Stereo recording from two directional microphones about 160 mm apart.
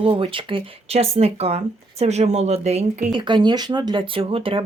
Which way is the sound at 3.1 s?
30° right (ahead or behind).